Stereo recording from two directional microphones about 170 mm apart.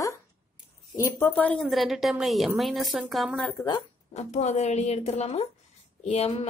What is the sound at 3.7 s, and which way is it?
A woman's voice, 40° left (ahead or behind).